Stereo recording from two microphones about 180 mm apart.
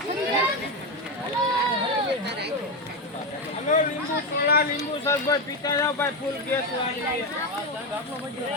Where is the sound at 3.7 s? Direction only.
45° left (ahead or behind).